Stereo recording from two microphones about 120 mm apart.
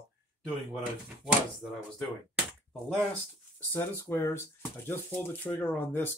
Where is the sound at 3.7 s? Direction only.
20° left (ahead or behind).